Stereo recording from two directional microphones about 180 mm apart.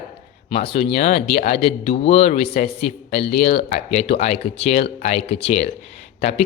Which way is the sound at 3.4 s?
60° left (ahead or behind).